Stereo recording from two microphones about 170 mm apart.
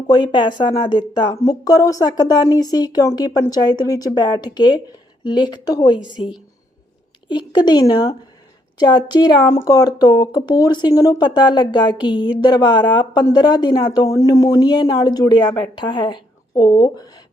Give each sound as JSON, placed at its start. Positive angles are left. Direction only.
{"t": 0.1, "sound": "speech", "side_deg": 25}
{"t": 7.3, "sound": "speech", "side_deg": 25}